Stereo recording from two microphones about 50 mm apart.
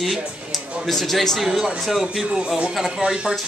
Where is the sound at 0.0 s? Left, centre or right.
Centre.